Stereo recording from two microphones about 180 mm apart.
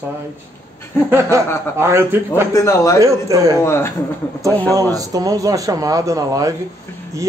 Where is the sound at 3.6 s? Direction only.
15° left (ahead or behind).